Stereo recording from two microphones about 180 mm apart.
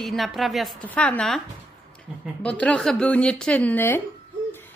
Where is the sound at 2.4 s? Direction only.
5° left (ahead or behind).